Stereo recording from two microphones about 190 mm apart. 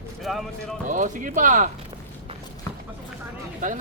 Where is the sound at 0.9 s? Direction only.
45° right (ahead or behind).